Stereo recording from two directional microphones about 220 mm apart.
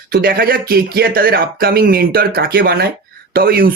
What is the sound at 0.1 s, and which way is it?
Speech, 40° right (ahead or behind).